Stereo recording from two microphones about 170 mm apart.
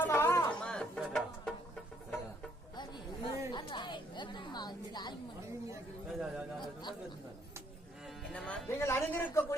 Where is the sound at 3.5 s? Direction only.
25° left (ahead or behind).